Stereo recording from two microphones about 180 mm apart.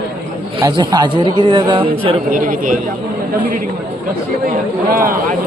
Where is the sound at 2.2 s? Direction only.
50° right (ahead or behind).